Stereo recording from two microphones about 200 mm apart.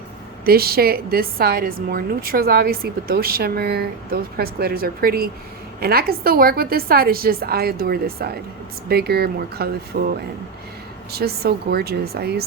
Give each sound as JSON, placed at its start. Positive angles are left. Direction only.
{"t": 0.4, "sound": "a woman's voice", "side_deg": -50}
{"t": 11.1, "sound": "a woman's voice", "side_deg": -50}